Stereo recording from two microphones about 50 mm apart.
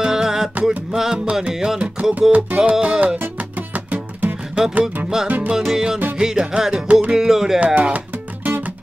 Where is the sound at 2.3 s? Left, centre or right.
Right.